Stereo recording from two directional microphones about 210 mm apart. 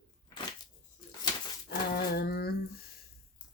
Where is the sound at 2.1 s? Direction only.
45° left (ahead or behind).